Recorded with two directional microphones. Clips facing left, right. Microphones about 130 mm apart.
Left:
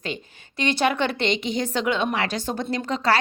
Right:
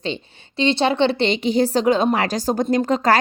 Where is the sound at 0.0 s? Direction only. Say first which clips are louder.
Right 5 dB; 25° right (ahead or behind).